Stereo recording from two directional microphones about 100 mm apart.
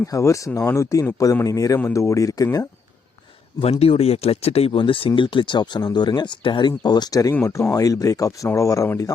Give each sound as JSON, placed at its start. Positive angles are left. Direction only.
{"t": 0.0, "sound": "speech", "side_deg": 30}
{"t": 3.6, "sound": "speech", "side_deg": 80}
{"t": 4.8, "sound": "speech", "side_deg": 65}